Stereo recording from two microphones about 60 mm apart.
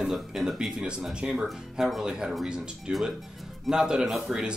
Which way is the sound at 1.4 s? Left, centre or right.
Centre.